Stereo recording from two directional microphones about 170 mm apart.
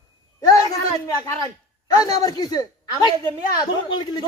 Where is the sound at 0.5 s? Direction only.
20° left (ahead or behind).